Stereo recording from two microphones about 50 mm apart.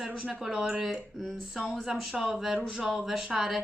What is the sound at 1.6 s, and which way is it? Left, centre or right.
Speech, centre.